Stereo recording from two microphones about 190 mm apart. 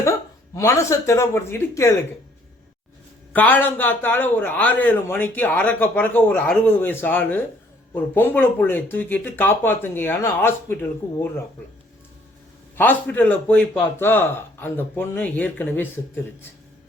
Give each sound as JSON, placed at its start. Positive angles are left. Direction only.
{"t": 0.5, "sound": "a man's voice", "side_deg": 15}
{"t": 3.3, "sound": "a man's voice", "side_deg": 10}
{"t": 12.7, "sound": "a man's voice", "side_deg": 10}